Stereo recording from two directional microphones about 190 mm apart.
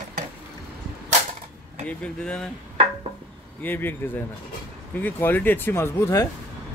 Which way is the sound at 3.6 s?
10° left (ahead or behind).